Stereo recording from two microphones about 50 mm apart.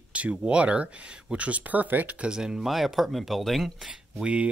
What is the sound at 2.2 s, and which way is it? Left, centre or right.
Speech, centre.